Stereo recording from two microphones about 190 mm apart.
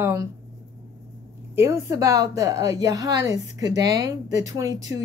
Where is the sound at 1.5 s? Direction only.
15° right (ahead or behind).